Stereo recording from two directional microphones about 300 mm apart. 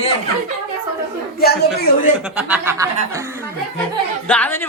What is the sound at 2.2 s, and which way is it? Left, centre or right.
Speech, centre.